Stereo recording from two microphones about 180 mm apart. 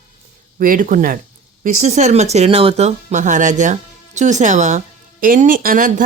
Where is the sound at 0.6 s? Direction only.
50° right (ahead or behind).